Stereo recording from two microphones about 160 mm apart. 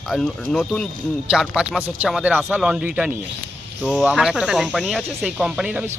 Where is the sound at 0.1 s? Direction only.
Centre (ahead or behind).